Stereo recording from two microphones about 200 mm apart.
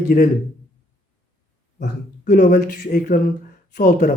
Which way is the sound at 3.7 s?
40° left (ahead or behind).